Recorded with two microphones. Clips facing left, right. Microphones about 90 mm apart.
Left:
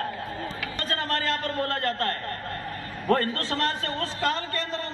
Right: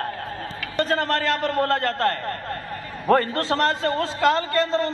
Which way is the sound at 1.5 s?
90° right.